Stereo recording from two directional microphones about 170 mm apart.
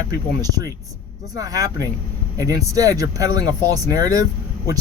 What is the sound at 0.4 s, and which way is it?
Speech, 20° right (ahead or behind).